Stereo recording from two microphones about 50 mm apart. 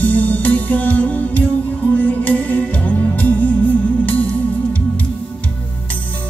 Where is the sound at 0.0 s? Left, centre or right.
Left.